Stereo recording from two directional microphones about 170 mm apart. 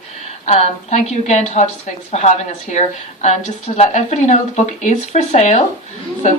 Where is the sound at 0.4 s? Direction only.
40° left (ahead or behind).